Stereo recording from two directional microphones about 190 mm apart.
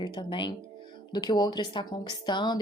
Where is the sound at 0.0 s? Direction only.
25° left (ahead or behind).